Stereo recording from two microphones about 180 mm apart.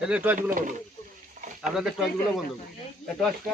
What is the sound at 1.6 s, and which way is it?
Speech, centre (ahead or behind).